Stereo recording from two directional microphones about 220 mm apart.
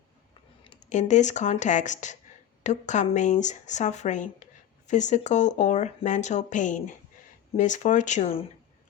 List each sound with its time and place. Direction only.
0.9 s speech: 35° left (ahead or behind)